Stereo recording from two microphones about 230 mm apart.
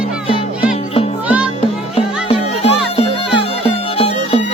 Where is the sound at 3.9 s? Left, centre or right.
Left.